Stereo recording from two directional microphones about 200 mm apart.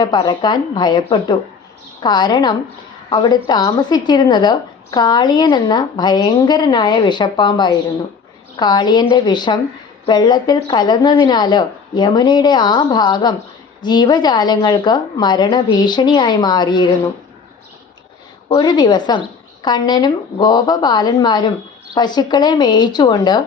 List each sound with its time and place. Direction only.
0.0 s a woman's voice: 20° left (ahead or behind)
18.5 s a woman's voice: 20° left (ahead or behind)